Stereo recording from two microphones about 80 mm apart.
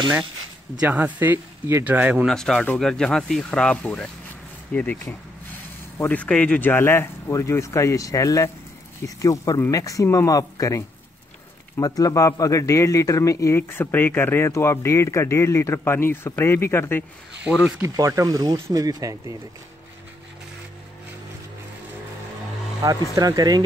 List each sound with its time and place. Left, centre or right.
0.7 s speech: right
2.2 s speech: centre
6.0 s speech: centre
6.7 s speech: left
13.6 s speech: left
17.8 s speech: right
23.1 s speech: right